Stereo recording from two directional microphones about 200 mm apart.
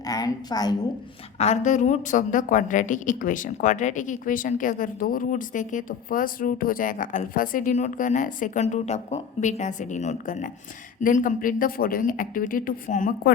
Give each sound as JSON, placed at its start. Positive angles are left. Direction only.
{"t": 0.0, "sound": "a woman's voice", "side_deg": 20}
{"t": 1.4, "sound": "a woman's voice", "side_deg": 35}